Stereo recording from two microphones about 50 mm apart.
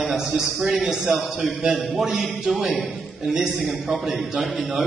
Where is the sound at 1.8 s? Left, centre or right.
Centre.